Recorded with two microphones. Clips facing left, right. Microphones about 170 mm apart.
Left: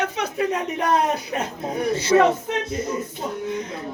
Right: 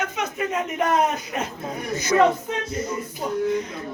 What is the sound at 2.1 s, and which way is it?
Speech, 25° left (ahead or behind).